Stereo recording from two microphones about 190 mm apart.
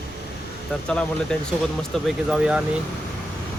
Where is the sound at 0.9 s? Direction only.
5° left (ahead or behind).